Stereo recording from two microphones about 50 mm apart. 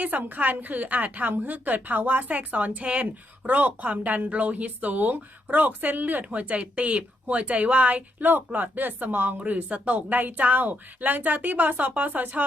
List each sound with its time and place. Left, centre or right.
0.0 s a woman's voice: right